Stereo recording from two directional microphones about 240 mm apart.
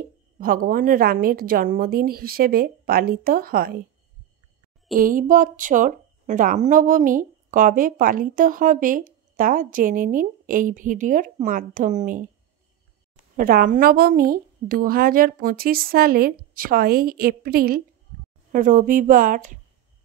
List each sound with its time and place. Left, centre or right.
0.4 s a woman's voice: right
4.9 s a woman's voice: right
13.4 s a woman's voice: right